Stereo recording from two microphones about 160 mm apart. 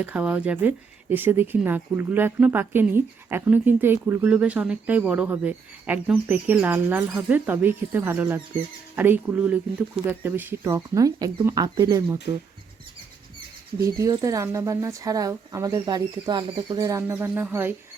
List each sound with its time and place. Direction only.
0.0 s speech: 10° right (ahead or behind)
13.8 s speech: 20° right (ahead or behind)